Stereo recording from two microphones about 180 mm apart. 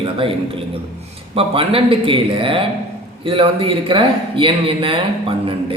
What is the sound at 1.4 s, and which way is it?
A man's voice, 30° right (ahead or behind).